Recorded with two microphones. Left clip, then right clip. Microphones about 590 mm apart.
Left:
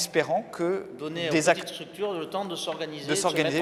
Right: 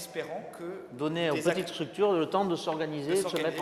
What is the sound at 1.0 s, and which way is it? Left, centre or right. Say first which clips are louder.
Speech: right 1 dB; right.